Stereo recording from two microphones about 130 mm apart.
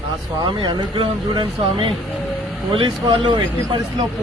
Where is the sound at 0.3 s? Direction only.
35° right (ahead or behind).